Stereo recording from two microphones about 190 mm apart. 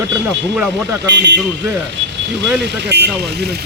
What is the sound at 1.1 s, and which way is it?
Speech, 65° right (ahead or behind).